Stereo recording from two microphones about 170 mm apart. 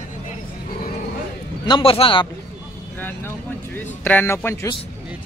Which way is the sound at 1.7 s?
30° left (ahead or behind).